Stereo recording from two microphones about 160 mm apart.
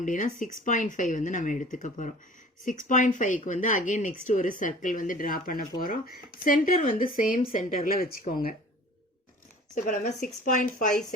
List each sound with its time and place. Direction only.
0.0 s speech: 55° left (ahead or behind)
9.7 s speech: 60° left (ahead or behind)